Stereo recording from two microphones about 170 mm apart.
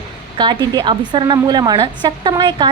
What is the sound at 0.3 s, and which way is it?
Speech, 25° right (ahead or behind).